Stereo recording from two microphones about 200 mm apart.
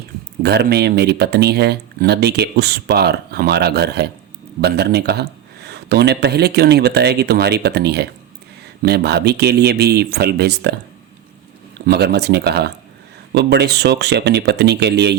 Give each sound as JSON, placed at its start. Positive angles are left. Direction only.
{"t": 0.4, "sound": "speech", "side_deg": -55}
{"t": 11.9, "sound": "speech", "side_deg": -55}